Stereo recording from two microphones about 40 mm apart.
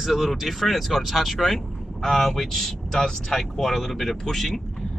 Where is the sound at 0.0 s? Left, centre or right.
Centre.